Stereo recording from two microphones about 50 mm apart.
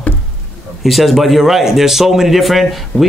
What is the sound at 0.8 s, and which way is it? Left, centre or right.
A man's voice, centre.